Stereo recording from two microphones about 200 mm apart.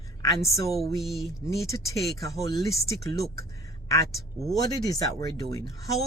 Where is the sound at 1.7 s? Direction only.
15° left (ahead or behind).